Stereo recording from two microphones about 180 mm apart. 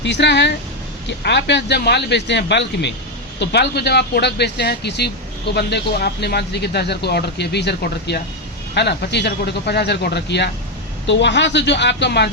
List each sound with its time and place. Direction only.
0.0 s speech: 75° left (ahead or behind)